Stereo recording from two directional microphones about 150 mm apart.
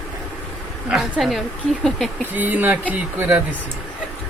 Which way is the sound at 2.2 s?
10° right (ahead or behind).